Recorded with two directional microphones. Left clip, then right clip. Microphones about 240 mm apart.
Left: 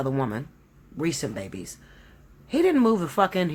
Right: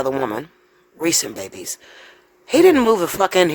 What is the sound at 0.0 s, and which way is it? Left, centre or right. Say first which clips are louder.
Speech: right 7 dB; right.